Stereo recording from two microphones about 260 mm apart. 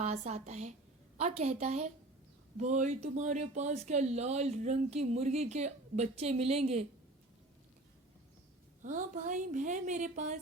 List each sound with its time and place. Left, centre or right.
0.0 s speech: right
8.8 s speech: right